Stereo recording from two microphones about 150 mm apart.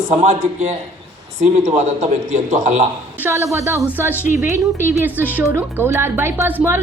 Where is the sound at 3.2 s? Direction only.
20° right (ahead or behind).